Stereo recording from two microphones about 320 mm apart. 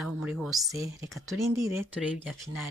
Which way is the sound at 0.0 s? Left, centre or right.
Centre.